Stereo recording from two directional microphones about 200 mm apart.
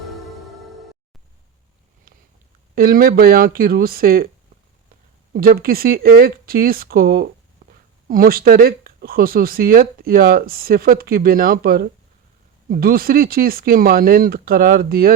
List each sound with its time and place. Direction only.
0.0 s music: centre (ahead or behind)
2.7 s speech: 45° right (ahead or behind)
5.3 s speech: 45° right (ahead or behind)
7.6 s a sound: 45° right (ahead or behind)
8.0 s speech: 45° right (ahead or behind)